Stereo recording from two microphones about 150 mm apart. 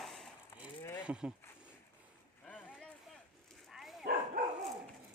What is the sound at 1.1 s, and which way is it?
Speech, 10° right (ahead or behind).